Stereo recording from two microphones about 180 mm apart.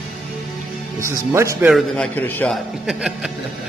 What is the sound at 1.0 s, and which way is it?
Speech, 15° right (ahead or behind).